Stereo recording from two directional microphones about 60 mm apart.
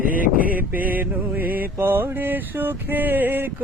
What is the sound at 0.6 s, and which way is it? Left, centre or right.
Mantra, right.